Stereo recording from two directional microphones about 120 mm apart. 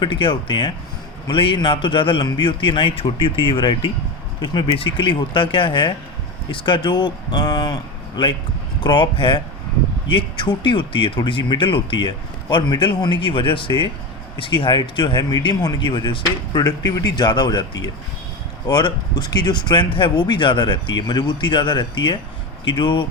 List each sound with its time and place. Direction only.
0.0 s speech: 45° left (ahead or behind)